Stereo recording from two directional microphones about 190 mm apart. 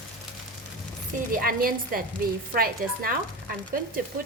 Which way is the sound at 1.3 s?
50° right (ahead or behind).